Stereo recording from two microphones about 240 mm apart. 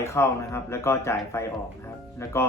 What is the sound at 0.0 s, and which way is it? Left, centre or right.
Speech, centre.